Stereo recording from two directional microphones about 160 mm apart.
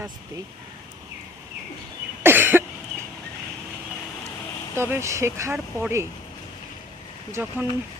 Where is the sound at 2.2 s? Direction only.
15° right (ahead or behind).